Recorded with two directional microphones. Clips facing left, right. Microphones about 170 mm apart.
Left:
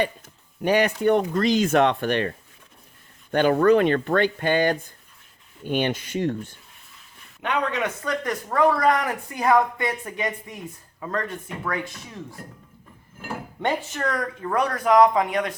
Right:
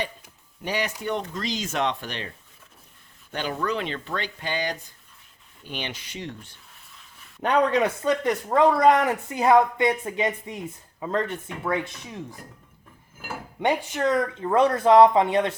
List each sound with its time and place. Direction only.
0.6 s speech: 55° left (ahead or behind)
3.3 s speech: 55° left (ahead or behind)
7.4 s speech: 35° right (ahead or behind)
13.6 s speech: 15° right (ahead or behind)